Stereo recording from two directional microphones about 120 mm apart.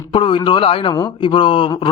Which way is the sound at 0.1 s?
45° left (ahead or behind).